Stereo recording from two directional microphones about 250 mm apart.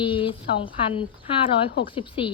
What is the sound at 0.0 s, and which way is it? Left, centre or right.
A woman's voice, centre.